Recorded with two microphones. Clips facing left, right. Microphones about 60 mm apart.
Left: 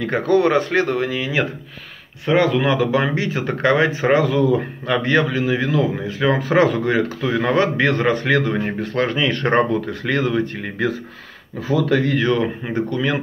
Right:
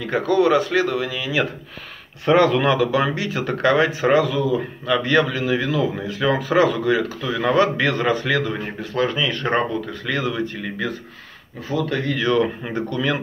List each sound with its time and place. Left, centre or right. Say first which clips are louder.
0.0 s speech: left 2 dB; left
2.2 s speech: right 1 dB; centre
2.8 s speech: left 1 dB; left
4.3 s speech: left 4 dB; left
5.1 s speech: left 1 dB; left
6.6 s speech: even; left
12.2 s speech: even; left